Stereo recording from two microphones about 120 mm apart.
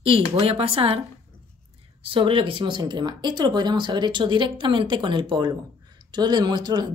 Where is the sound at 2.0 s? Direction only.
45° right (ahead or behind).